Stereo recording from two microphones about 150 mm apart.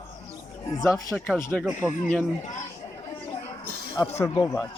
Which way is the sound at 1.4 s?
15° left (ahead or behind).